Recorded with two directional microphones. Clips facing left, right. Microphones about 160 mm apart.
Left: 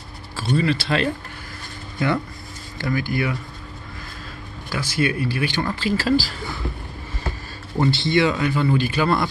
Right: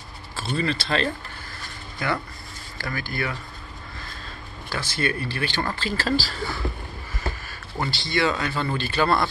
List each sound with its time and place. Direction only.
0.4 s speech: 10° left (ahead or behind)
2.8 s speech: 15° left (ahead or behind)
4.7 s speech: 10° left (ahead or behind)
7.8 s speech: 20° left (ahead or behind)